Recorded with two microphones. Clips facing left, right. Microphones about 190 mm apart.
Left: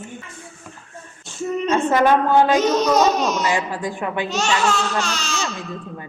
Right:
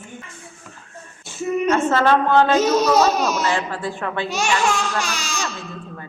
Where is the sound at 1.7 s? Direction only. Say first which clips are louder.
Left 1 dB; 15° left (ahead or behind).